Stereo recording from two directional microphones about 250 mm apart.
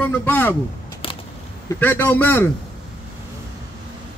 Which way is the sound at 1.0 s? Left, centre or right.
Left.